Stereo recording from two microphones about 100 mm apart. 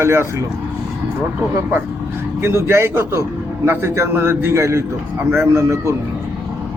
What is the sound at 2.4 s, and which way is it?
Speech, 25° right (ahead or behind).